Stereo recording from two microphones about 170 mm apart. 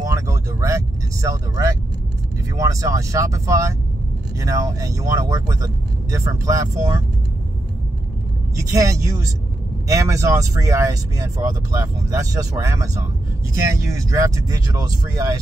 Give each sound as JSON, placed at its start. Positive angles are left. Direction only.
{"t": 0.0, "sound": "vehicle", "side_deg": -20}
{"t": 2.5, "sound": "speech", "side_deg": -20}
{"t": 8.7, "sound": "speech", "side_deg": -20}